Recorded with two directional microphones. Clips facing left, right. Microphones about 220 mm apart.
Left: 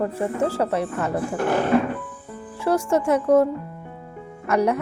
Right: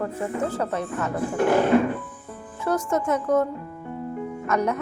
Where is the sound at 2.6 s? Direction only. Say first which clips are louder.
Left 3 dB; 30° left (ahead or behind).